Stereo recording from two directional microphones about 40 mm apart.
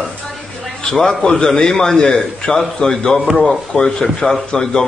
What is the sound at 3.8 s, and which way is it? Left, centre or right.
Speech, centre.